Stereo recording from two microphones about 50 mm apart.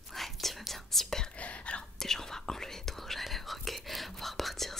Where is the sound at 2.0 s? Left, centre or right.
Centre.